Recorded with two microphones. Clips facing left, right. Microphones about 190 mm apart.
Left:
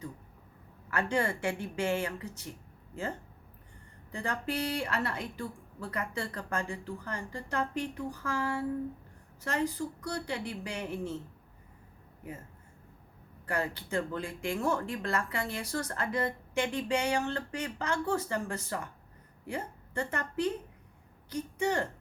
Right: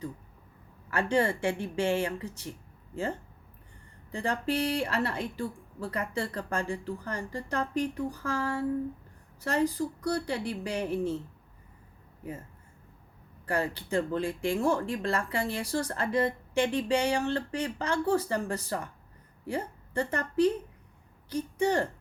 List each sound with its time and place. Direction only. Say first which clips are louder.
0.9 s speech: right 4 dB; 30° right (ahead or behind)
4.1 s speech: right 4 dB; 30° right (ahead or behind)
13.4 s a woman's voice: right 3 dB; 30° right (ahead or behind)